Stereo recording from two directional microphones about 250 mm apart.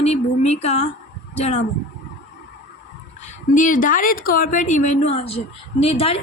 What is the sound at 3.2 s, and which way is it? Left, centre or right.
A woman's voice, left.